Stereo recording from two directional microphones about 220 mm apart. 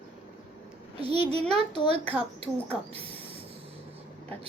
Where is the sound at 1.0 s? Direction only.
25° right (ahead or behind).